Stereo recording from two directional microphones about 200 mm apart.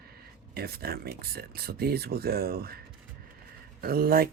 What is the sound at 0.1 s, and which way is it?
Speech, 50° right (ahead or behind).